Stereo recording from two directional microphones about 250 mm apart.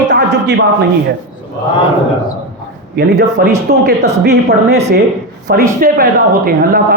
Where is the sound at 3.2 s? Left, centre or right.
Right.